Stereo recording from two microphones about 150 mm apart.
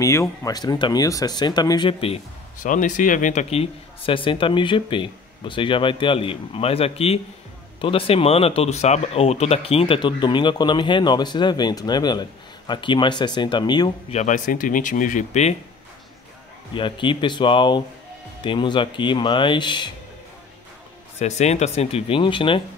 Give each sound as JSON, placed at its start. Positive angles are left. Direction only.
{"t": 0.0, "sound": "speech", "side_deg": 20}
{"t": 2.6, "sound": "speech", "side_deg": 60}
{"t": 14.1, "sound": "speech", "side_deg": 55}
{"t": 16.7, "sound": "speech", "side_deg": 35}
{"t": 21.2, "sound": "speech", "side_deg": 50}